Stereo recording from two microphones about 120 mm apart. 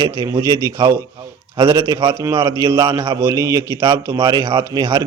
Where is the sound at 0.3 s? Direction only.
30° right (ahead or behind).